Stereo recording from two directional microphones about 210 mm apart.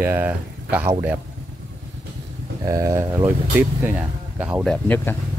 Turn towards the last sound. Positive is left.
turn(degrees=5)  # may be behind; listen again after turning